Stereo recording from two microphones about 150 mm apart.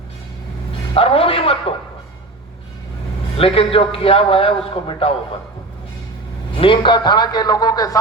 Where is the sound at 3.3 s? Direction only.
40° left (ahead or behind).